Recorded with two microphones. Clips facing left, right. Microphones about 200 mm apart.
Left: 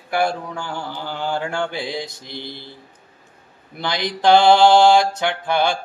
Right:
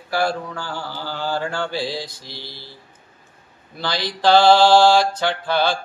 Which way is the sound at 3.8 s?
20° left (ahead or behind).